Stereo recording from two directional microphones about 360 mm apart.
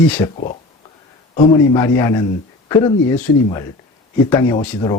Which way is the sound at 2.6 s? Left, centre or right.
Centre.